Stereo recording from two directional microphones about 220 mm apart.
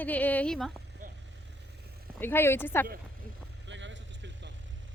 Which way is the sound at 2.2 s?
10° left (ahead or behind).